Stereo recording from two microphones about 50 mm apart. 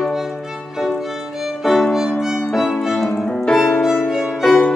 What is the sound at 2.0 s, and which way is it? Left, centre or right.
Music, centre.